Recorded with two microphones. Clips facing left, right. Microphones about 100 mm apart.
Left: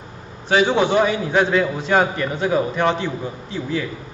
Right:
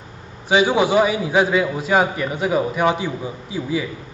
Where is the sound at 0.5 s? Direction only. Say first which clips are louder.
Even; 10° right (ahead or behind).